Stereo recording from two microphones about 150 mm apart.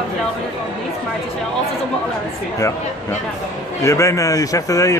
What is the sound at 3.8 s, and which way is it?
A man's voice, 20° left (ahead or behind).